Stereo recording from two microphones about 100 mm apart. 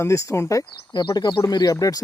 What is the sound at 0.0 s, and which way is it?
Speech, 30° left (ahead or behind).